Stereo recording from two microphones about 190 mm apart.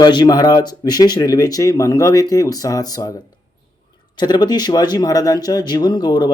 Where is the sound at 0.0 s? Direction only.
20° left (ahead or behind).